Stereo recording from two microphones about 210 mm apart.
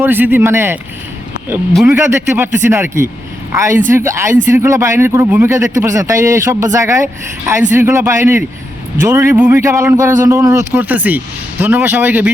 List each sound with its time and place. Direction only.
0.0 s a man's voice: 10° right (ahead or behind)
1.9 s a man's voice: 10° right (ahead or behind)